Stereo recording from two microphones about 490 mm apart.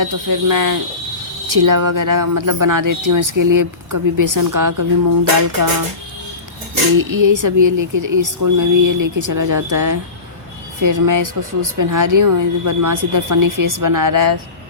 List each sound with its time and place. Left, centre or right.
0.0 s speech: right
6.9 s speech: right